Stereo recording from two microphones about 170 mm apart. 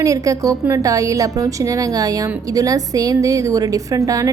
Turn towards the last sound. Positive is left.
turn(degrees=-20)  # may be behind; listen again after turning